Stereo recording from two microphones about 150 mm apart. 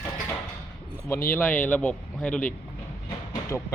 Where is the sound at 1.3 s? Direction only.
10° left (ahead or behind).